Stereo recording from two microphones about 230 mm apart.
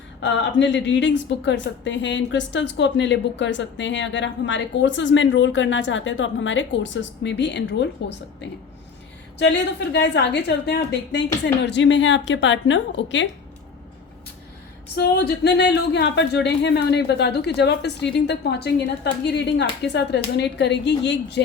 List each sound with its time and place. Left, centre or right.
0.2 s a woman's voice: left
9.4 s a woman's voice: left
14.9 s a woman's voice: left